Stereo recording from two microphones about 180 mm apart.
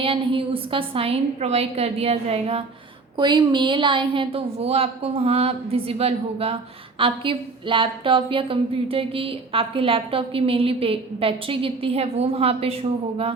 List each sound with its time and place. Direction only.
0.0 s a woman's voice: 30° right (ahead or behind)